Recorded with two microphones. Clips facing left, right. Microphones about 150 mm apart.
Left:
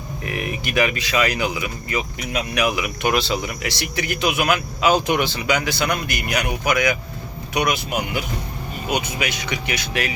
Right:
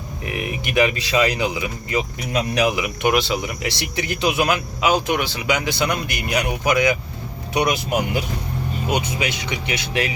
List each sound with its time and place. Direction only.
0.3 s speech: 20° right (ahead or behind)
5.0 s speech: 5° right (ahead or behind)
5.5 s speech: 25° right (ahead or behind)